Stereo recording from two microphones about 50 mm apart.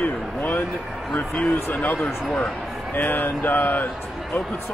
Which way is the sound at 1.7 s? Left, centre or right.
Left.